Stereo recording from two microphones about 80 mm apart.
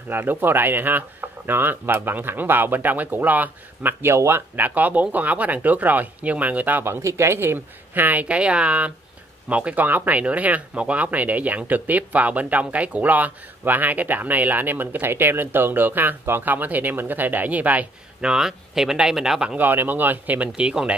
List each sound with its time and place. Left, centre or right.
0.1 s speech: right
18.3 s speech: centre
19.5 s speech: right